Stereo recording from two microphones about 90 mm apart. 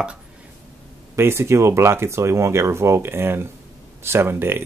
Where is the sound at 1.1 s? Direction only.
25° right (ahead or behind).